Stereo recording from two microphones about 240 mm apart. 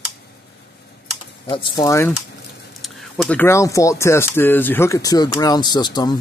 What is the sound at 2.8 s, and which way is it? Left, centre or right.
Speech, centre.